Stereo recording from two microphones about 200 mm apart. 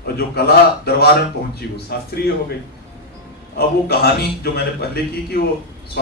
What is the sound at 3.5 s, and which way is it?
Speech, 50° left (ahead or behind).